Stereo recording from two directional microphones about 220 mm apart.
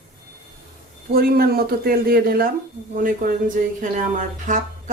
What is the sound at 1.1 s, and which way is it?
Speech, 45° right (ahead or behind).